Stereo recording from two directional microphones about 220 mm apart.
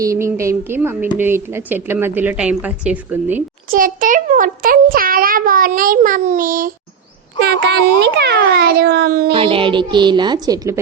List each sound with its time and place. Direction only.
0.0 s a woman's voice: 15° right (ahead or behind)
3.7 s a child's voice: 40° right (ahead or behind)
7.4 s a child's voice: 50° right (ahead or behind)
9.3 s a woman's voice: 25° right (ahead or behind)